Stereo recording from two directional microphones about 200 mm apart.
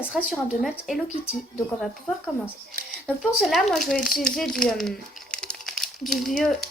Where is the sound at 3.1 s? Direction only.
Centre (ahead or behind).